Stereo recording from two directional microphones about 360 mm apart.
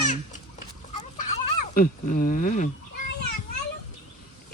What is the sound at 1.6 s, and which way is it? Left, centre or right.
Speech, left.